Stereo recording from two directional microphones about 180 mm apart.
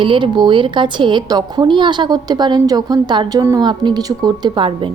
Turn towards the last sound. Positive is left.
turn(degrees=-30)  # may be behind; listen again after turning